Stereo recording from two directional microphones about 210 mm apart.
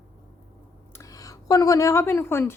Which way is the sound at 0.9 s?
15° left (ahead or behind).